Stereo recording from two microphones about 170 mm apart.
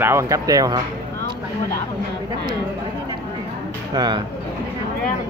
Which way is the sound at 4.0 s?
25° right (ahead or behind).